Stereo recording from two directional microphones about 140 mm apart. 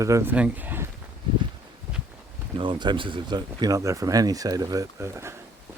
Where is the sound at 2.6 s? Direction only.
35° right (ahead or behind); by 5.3 s 20° right (ahead or behind).